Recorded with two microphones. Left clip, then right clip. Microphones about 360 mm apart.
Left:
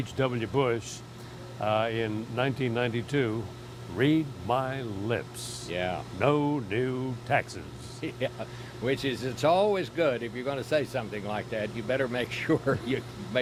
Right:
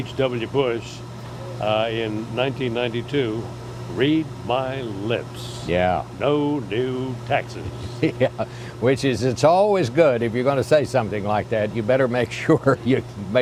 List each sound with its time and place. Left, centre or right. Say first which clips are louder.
0.2 s speech: right 6 dB; left
5.6 s speech: right 12 dB; right
6.1 s speech: right 5 dB; left
8.0 s speech: right 12 dB; right